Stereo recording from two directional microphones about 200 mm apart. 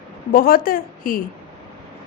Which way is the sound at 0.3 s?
45° left (ahead or behind).